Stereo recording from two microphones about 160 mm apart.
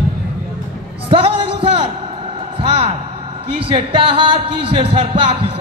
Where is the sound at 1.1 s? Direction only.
35° right (ahead or behind).